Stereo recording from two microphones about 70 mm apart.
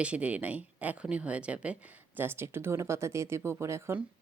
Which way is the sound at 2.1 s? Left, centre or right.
Right.